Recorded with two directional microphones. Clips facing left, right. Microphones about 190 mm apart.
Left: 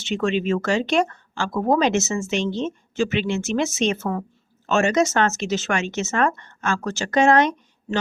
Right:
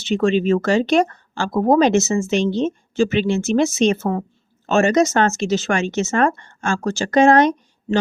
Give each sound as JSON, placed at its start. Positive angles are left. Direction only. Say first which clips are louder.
{"t": 0.0, "sound": "speech", "louder": "right 5 dB", "side_deg": -35}